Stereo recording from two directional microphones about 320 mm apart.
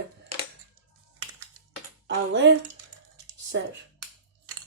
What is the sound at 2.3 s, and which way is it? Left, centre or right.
Speech, right.